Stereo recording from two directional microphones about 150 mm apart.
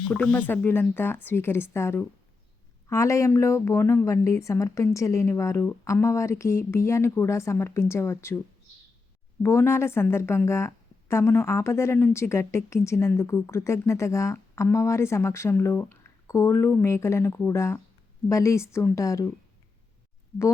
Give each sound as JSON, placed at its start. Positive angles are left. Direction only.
{"t": 0.1, "sound": "a woman's voice", "side_deg": 5}
{"t": 9.4, "sound": "a woman's voice", "side_deg": 15}